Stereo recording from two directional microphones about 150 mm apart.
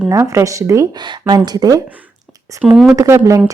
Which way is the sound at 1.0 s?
30° right (ahead or behind).